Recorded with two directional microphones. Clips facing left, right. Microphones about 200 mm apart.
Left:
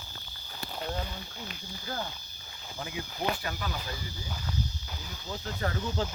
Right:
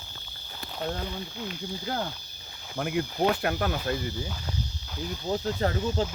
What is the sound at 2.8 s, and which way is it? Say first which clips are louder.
Speech: right 10 dB; 60° right (ahead or behind).